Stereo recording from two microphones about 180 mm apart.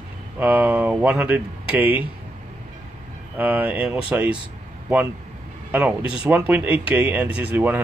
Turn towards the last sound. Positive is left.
turn(degrees=-10)  # may be behind; listen again after turning